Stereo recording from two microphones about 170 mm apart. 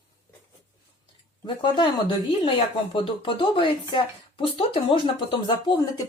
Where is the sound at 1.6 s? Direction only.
25° left (ahead or behind).